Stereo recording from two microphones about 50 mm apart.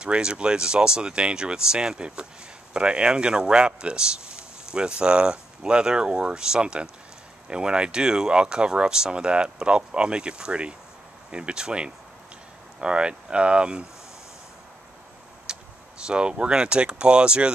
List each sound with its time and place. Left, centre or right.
0.0 s speech: centre
15.5 s vehicle: centre
16.1 s speech: right